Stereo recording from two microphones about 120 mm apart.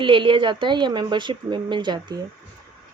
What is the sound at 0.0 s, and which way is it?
Speech, 45° right (ahead or behind).